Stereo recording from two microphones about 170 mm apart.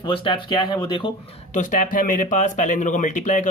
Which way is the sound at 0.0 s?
30° left (ahead or behind).